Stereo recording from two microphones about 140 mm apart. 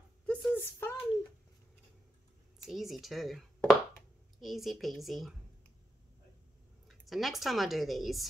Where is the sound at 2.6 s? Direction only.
Centre (ahead or behind).